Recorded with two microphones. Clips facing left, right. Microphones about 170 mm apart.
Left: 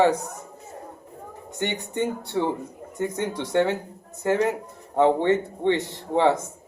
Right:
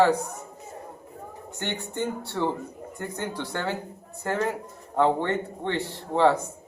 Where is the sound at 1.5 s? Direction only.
15° left (ahead or behind).